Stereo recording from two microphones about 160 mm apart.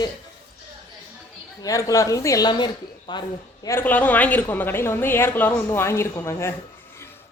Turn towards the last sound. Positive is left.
turn(degrees=15)  # may be behind; listen again after turning